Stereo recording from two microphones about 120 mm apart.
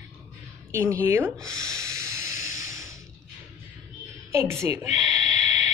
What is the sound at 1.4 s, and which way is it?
Sanding, 25° right (ahead or behind).